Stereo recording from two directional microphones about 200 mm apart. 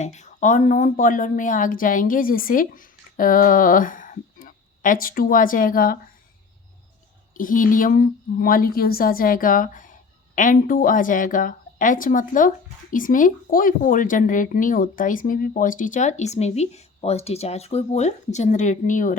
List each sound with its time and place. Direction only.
0.0 s a woman's voice: 35° left (ahead or behind)
7.3 s a woman's voice: 45° left (ahead or behind)